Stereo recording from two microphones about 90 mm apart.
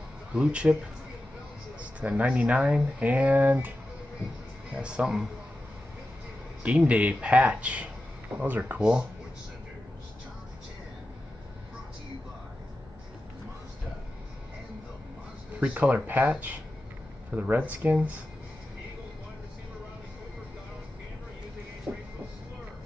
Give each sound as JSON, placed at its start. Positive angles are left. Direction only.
{"t": 0.3, "sound": "speech", "side_deg": -10}
{"t": 1.8, "sound": "speech", "side_deg": -15}
{"t": 4.7, "sound": "speech", "side_deg": -10}
{"t": 6.8, "sound": "speech", "side_deg": -15}
{"t": 15.6, "sound": "speech", "side_deg": -15}
{"t": 21.9, "sound": "train", "side_deg": -15}